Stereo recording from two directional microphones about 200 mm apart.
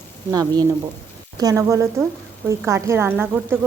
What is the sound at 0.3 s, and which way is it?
Speech, 20° right (ahead or behind).